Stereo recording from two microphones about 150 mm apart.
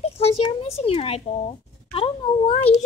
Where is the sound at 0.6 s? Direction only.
40° left (ahead or behind).